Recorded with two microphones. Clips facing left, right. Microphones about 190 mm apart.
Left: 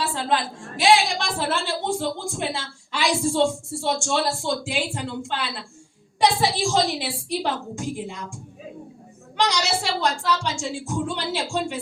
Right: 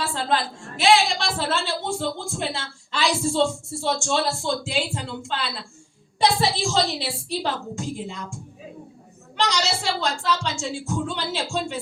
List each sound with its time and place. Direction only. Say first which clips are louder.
0.0 s a sound: left 1 dB; 15° left (ahead or behind)
0.8 s speech: even; 15° left (ahead or behind)
10.0 s speech: left 1 dB; 15° left (ahead or behind)